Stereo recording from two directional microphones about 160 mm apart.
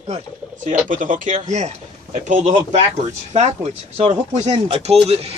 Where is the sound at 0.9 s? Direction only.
55° right (ahead or behind).